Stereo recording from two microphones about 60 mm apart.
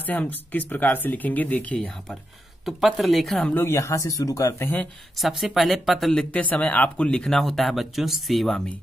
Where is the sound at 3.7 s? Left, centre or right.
Left.